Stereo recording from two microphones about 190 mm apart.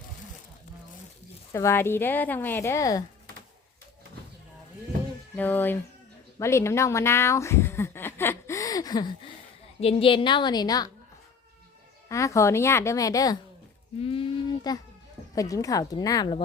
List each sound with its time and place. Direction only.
1.5 s speech: 15° left (ahead or behind)
5.4 s a woman's voice: 10° left (ahead or behind)
12.0 s speech: 15° left (ahead or behind)
14.0 s a sound: 30° left (ahead or behind)
15.4 s a woman's voice: 20° left (ahead or behind)